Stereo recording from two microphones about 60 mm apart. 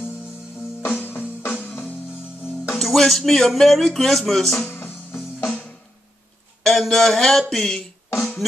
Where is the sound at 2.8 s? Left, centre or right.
Centre.